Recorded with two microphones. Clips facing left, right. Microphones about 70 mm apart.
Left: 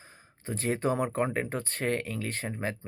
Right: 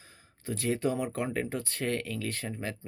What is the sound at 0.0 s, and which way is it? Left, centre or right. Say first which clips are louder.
Speech: right 1 dB; left.